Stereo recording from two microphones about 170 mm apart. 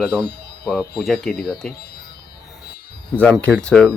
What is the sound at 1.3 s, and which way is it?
Speech, 65° left (ahead or behind).